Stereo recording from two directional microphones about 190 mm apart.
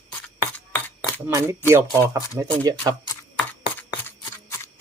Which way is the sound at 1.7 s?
15° right (ahead or behind).